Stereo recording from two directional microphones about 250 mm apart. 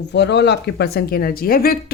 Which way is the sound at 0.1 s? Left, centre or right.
Left.